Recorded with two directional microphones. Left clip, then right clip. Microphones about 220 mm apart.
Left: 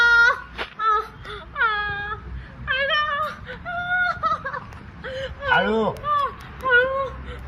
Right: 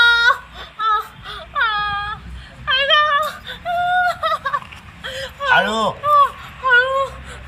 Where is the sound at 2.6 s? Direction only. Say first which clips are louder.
Right 7 dB; 15° right (ahead or behind).